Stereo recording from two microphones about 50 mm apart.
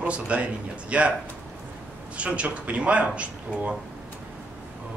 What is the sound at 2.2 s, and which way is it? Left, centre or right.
Speech, right.